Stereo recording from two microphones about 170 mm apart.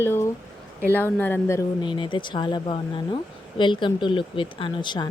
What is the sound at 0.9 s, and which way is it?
Speech, 10° left (ahead or behind).